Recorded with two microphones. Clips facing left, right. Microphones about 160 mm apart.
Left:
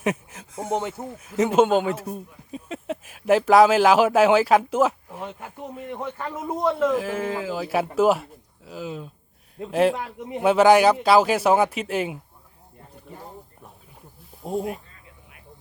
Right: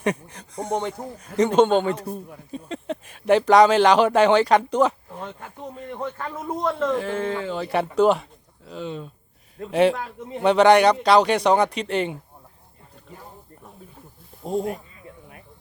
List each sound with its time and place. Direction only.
0.0 s a man's voice: 5° left (ahead or behind)
10.0 s a man's voice: 15° left (ahead or behind)
10.4 s a man's voice: 5° left (ahead or behind)
14.4 s a man's voice: 5° left (ahead or behind)